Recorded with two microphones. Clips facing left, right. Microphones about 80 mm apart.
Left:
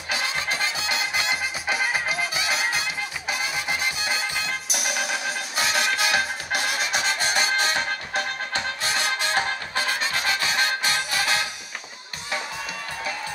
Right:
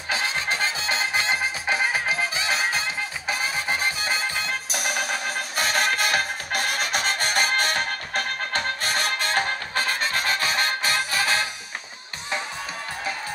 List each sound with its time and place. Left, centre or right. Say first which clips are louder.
0.1 s music: right 1 dB; right